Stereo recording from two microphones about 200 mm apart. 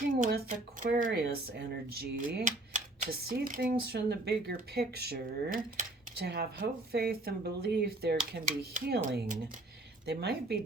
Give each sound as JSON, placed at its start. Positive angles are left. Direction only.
{"t": 0.3, "sound": "speech", "side_deg": -50}
{"t": 2.4, "sound": "speech", "side_deg": -40}
{"t": 3.8, "sound": "speech", "side_deg": -55}
{"t": 10.1, "sound": "speech", "side_deg": -55}